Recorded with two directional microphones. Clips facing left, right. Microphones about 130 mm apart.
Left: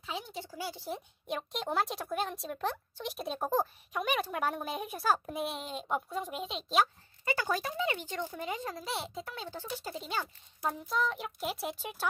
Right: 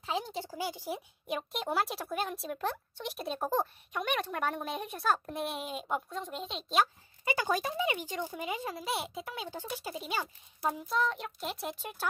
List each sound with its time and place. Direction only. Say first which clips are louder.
0.0 s speech: right 5 dB; 40° right (ahead or behind)
0.6 s a child's voice: right 1 dB; 15° right (ahead or behind); by 6.9 s centre (ahead or behind)
7.2 s speech: right 1 dB; 15° right (ahead or behind); by 12.1 s centre (ahead or behind)